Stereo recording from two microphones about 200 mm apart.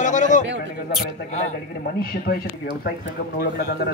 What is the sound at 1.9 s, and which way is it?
Speech, 50° left (ahead or behind).